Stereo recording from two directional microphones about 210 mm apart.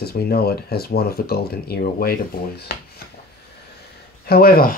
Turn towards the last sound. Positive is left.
turn(degrees=45)  # may be behind; listen again after turning